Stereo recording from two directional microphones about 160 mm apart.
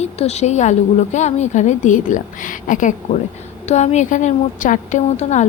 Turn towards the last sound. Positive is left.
turn(degrees=45)  # may be behind; listen again after turning